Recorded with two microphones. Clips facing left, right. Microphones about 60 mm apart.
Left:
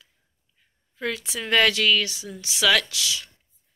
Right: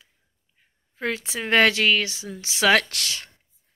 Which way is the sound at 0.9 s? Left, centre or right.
Right.